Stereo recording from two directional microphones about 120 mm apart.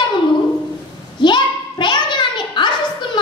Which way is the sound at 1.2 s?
40° left (ahead or behind).